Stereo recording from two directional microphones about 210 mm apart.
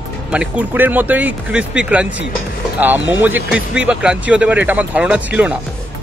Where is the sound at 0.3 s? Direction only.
5° right (ahead or behind).